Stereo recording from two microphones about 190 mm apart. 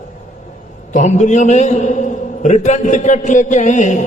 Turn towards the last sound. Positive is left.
turn(degrees=40)  # may be behind; listen again after turning